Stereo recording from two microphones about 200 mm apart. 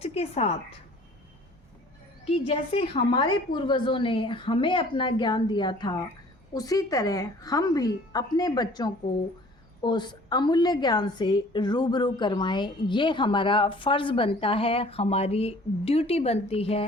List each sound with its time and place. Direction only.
0.0 s a woman's voice: 30° left (ahead or behind)
2.2 s a woman's voice: 30° left (ahead or behind)